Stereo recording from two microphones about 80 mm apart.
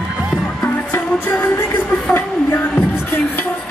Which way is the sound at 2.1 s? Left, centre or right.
Left.